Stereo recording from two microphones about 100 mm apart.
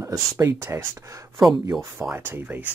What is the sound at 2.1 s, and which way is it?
Speech, 20° right (ahead or behind).